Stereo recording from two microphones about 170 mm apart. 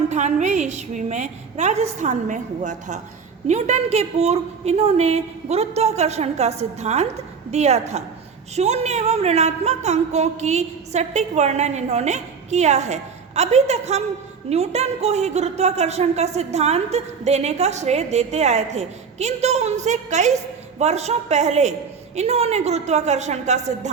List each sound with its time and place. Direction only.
0.1 s a woman's voice: 45° right (ahead or behind)